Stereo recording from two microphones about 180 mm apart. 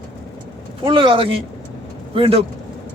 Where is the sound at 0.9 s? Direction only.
30° right (ahead or behind).